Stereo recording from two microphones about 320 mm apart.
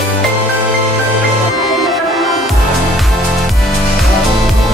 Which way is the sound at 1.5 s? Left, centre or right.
Centre.